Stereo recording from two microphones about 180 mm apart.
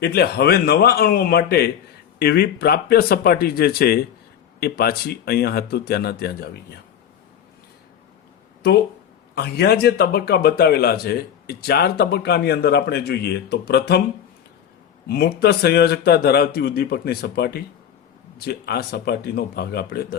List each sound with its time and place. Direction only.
0.0 s a man's voice: 65° left (ahead or behind)
9.3 s a man's voice: 65° left (ahead or behind)
15.1 s a man's voice: 60° left (ahead or behind)